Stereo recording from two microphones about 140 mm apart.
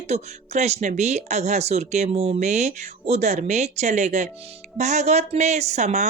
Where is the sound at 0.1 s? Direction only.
50° right (ahead or behind).